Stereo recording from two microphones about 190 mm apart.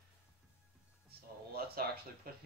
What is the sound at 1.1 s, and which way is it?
Music, 55° right (ahead or behind).